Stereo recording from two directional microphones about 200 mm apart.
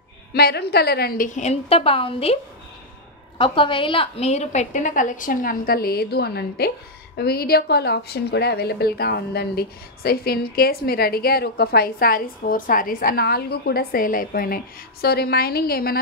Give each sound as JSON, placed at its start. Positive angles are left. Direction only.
{"t": 0.3, "sound": "a woman's voice", "side_deg": 55}
{"t": 3.3, "sound": "a woman's voice", "side_deg": 25}